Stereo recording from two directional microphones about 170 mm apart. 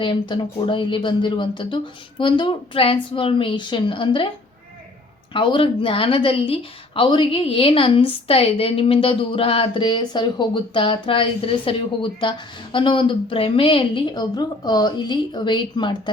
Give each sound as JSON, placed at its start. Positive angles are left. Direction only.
{"t": 0.0, "sound": "speech", "side_deg": 30}
{"t": 5.3, "sound": "speech", "side_deg": 30}